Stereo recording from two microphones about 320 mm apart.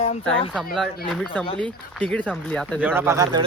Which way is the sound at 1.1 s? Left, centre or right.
Centre.